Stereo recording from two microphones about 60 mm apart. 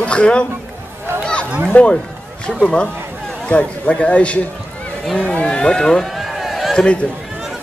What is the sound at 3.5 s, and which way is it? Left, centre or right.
A man's voice, centre.